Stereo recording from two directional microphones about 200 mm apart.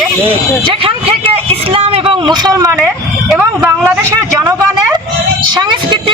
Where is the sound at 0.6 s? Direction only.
25° right (ahead or behind).